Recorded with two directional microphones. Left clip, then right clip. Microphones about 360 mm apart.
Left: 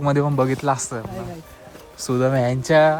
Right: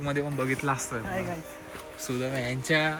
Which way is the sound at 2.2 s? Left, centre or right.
Left.